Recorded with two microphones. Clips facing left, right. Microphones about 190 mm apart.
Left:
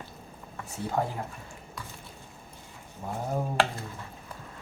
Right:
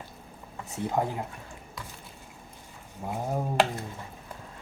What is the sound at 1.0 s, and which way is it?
Speech, 15° right (ahead or behind).